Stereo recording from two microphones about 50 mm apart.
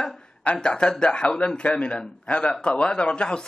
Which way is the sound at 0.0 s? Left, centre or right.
Left.